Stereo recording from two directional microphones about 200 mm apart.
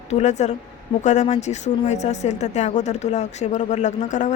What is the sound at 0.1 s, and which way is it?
Speech, 35° left (ahead or behind).